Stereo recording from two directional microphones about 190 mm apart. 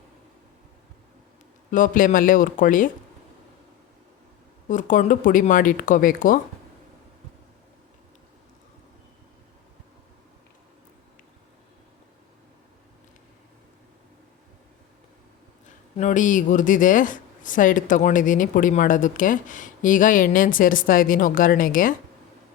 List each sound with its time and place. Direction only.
1.7 s speech: 45° left (ahead or behind)
4.7 s speech: 40° left (ahead or behind)
16.0 s speech: 40° left (ahead or behind)